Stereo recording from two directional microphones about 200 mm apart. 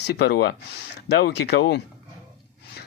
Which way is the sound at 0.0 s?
55° left (ahead or behind).